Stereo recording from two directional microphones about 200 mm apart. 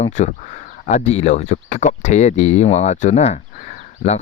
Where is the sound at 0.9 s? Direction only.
35° left (ahead or behind).